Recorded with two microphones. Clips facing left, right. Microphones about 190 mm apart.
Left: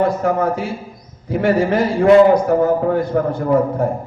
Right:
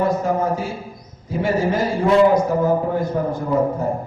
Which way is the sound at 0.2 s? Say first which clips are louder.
Left 3 dB; 65° left (ahead or behind).